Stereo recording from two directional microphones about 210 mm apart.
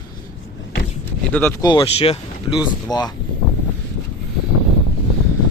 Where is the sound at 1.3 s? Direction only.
10° left (ahead or behind).